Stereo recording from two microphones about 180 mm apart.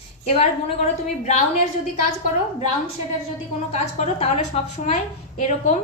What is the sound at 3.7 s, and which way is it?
A woman's voice, 40° left (ahead or behind).